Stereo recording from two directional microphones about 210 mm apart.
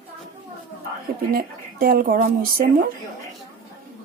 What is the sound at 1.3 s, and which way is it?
Speech, 45° right (ahead or behind).